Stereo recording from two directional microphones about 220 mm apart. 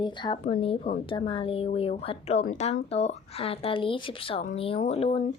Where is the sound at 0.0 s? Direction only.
20° left (ahead or behind).